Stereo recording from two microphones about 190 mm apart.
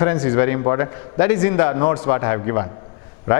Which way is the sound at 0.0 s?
15° left (ahead or behind).